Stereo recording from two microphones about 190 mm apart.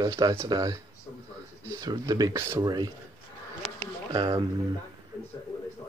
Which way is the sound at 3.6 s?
Centre (ahead or behind).